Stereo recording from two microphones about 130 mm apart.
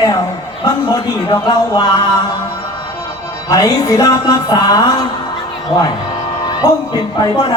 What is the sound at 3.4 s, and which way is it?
Music, 25° left (ahead or behind).